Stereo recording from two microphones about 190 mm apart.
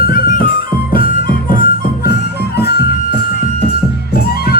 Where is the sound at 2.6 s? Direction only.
60° left (ahead or behind).